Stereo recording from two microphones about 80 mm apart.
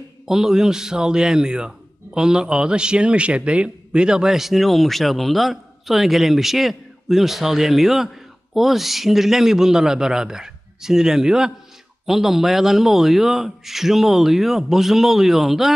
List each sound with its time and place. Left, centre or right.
0.3 s a man's voice: centre